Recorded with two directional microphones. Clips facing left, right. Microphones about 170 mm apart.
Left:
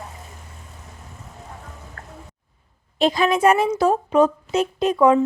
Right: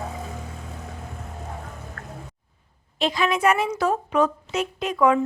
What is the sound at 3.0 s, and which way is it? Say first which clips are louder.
A woman's voice: left 4 dB; 40° left (ahead or behind).